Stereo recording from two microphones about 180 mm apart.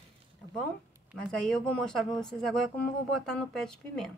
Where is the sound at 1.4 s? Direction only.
5° left (ahead or behind).